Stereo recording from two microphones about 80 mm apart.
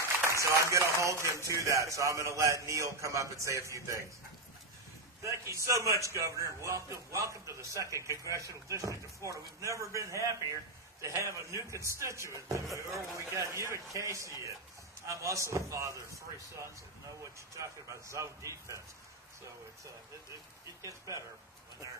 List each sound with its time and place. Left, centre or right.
0.3 s a man's voice: right
5.2 s a man's voice: right